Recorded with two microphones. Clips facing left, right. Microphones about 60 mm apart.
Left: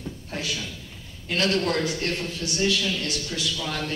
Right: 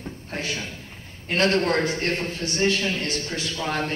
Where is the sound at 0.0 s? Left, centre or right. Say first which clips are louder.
Right 1 dB; right.